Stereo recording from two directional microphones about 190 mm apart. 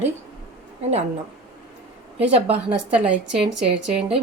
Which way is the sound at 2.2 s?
30° right (ahead or behind).